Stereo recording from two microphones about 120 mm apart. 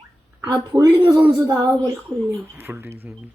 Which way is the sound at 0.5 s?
25° right (ahead or behind).